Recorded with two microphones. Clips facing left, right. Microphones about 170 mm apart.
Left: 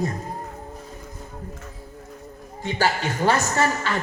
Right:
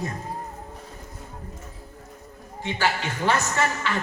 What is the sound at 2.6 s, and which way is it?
A man's voice, 40° left (ahead or behind).